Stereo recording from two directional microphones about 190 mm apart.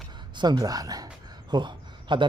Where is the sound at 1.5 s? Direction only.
25° right (ahead or behind).